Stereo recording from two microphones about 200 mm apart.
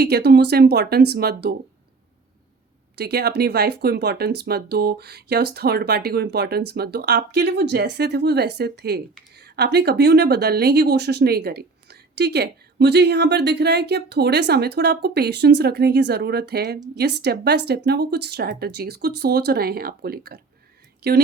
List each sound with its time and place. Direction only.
0.0 s speech: 55° right (ahead or behind)
3.0 s speech: 55° right (ahead or behind)